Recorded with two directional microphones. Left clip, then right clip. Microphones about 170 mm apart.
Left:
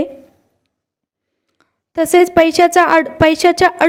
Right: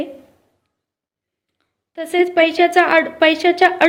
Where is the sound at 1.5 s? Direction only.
45° left (ahead or behind).